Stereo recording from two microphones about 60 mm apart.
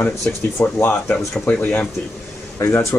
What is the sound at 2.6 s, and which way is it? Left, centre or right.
Speech, left.